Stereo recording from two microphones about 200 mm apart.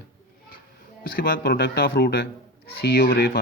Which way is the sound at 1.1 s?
50° left (ahead or behind).